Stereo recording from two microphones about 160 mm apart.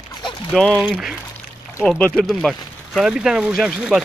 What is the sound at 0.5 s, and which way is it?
Speech, 5° left (ahead or behind).